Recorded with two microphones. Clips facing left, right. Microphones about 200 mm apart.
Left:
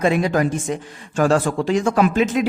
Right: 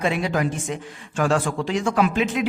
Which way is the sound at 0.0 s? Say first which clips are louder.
Left 5 dB; 45° left (ahead or behind).